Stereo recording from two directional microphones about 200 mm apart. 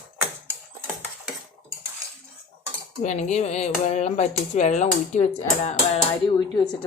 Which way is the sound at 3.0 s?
35° left (ahead or behind).